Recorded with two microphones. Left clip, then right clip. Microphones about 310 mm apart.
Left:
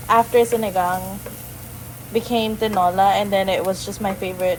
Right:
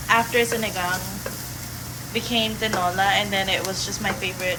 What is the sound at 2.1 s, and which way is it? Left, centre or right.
A woman's voice, centre.